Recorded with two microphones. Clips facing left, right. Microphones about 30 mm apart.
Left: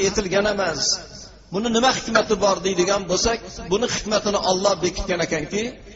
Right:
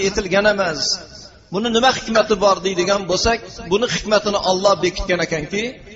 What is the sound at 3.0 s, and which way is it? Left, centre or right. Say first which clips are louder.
Speech: right 4 dB; right.